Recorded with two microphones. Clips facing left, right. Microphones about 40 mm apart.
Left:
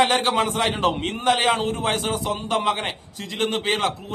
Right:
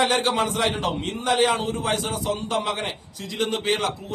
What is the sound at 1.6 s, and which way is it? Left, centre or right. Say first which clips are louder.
A man's voice: left 2 dB; left.